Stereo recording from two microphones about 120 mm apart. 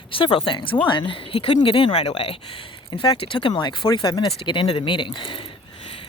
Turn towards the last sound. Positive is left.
turn(degrees=45)  # may be behind; listen again after turning